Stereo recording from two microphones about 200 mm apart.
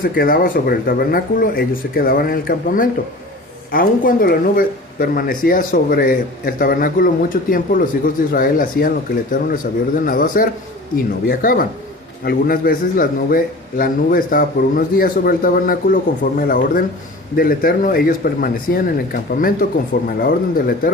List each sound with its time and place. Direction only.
0.0 s speech: 45° left (ahead or behind)